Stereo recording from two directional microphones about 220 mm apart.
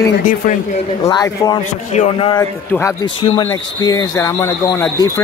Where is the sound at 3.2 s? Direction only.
25° left (ahead or behind).